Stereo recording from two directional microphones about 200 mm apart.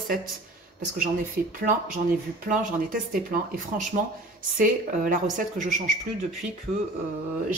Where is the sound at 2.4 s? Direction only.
40° right (ahead or behind).